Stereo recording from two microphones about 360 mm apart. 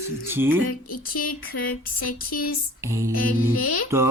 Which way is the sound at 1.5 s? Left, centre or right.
Left.